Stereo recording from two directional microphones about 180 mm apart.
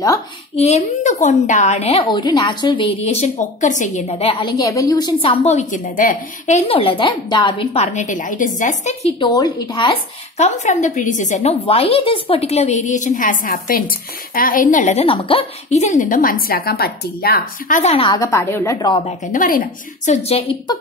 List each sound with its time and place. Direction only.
0.6 s a woman's voice: 35° left (ahead or behind)
4.1 s a woman's voice: 30° left (ahead or behind)
9.2 s a woman's voice: 20° left (ahead or behind)
10.3 s a woman's voice: 40° left (ahead or behind)
17.9 s a woman's voice: 30° left (ahead or behind)
18.2 s a woman's voice: 15° left (ahead or behind)
19.3 s a woman's voice: 50° left (ahead or behind)